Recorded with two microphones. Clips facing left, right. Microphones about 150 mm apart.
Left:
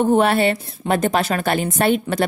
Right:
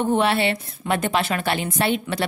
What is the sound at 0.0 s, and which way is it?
A woman's voice, 45° left (ahead or behind).